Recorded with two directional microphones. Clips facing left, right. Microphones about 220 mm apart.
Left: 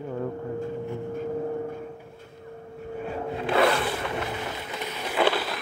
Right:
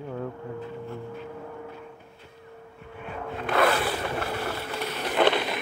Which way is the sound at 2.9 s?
35° left (ahead or behind).